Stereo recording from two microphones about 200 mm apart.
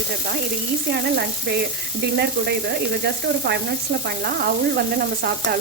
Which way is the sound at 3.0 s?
55° right (ahead or behind).